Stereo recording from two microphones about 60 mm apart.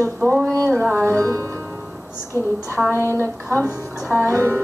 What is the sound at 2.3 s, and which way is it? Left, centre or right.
Speech, left.